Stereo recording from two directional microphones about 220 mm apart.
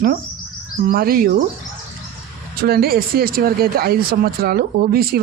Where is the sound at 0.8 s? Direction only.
40° right (ahead or behind).